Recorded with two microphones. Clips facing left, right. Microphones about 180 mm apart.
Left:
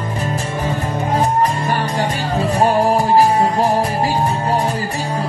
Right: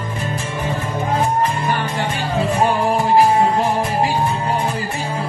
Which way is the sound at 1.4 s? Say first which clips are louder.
Left 2 dB; 35° left (ahead or behind).